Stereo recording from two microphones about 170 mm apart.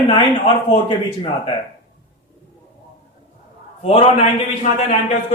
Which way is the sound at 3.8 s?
40° left (ahead or behind).